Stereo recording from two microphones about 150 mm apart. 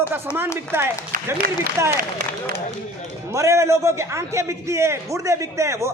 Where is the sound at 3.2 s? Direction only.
20° right (ahead or behind).